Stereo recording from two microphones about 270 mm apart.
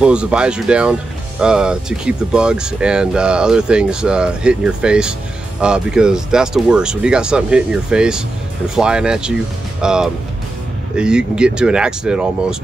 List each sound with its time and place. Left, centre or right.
0.0 s speech: centre